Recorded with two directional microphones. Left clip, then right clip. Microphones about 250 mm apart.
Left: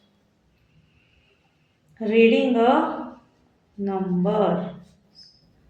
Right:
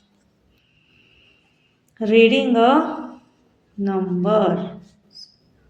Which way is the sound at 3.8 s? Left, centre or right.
Right.